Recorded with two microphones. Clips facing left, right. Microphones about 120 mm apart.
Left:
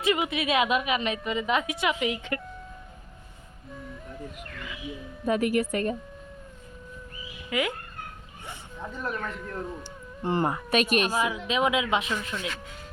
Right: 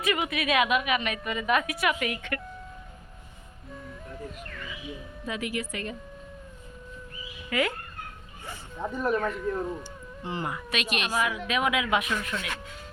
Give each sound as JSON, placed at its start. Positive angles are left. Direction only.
{"t": 0.0, "sound": "a woman's voice", "side_deg": 25}
{"t": 5.2, "sound": "a woman's voice", "side_deg": 45}
{"t": 7.5, "sound": "speech", "side_deg": 15}
{"t": 8.8, "sound": "speech", "side_deg": -15}
{"t": 10.2, "sound": "a woman's voice", "side_deg": 50}
{"t": 11.1, "sound": "a woman's voice", "side_deg": 25}